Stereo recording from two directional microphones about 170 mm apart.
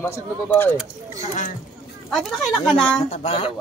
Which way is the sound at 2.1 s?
Centre (ahead or behind).